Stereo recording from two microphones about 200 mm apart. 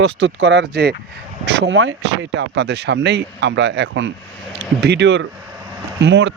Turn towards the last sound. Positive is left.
turn(degrees=-65)  # may be behind; listen again after turning